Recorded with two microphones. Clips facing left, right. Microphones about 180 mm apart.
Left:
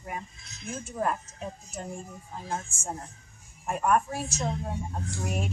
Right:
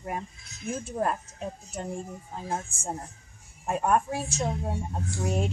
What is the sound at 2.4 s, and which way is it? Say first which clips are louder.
Speech: right 2 dB; 25° right (ahead or behind).